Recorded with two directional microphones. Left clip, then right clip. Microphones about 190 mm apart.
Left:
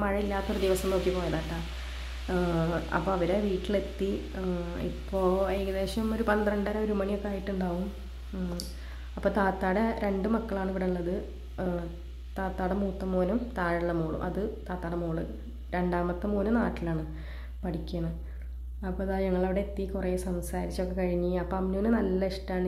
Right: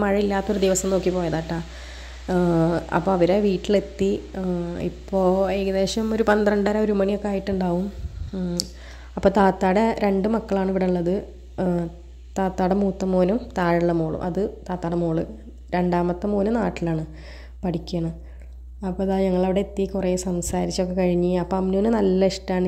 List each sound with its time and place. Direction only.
0.0 s a woman's voice: 35° right (ahead or behind)